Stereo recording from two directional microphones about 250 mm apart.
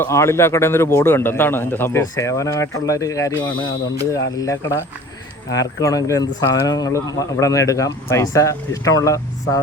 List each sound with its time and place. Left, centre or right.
0.0 s speech: centre